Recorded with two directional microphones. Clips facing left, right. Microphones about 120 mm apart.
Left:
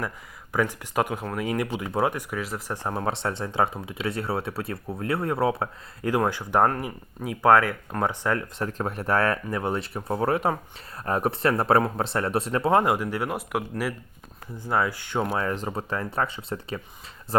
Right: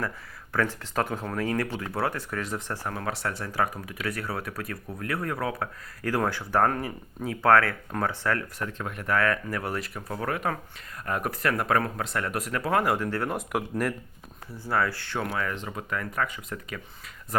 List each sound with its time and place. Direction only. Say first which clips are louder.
0.5 s speech: left 2 dB; 15° left (ahead or behind)
2.7 s speech: left 4 dB; 25° left (ahead or behind)
8.6 s speech: left 4 dB; 35° left (ahead or behind); by 13.9 s 5° left (ahead or behind)
14.5 s speech: left 2 dB; 20° left (ahead or behind)